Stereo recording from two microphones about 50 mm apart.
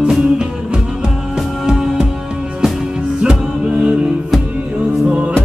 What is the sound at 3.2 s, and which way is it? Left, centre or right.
Music, centre.